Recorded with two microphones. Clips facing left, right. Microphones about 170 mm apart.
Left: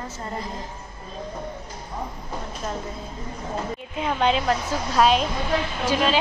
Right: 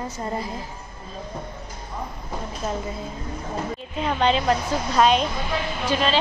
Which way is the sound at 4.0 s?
5° left (ahead or behind).